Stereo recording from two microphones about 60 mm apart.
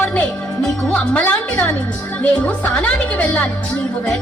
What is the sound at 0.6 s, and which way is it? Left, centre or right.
Speech, centre.